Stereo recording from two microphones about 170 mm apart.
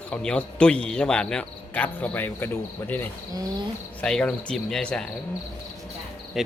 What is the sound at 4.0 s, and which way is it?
Music, 5° left (ahead or behind).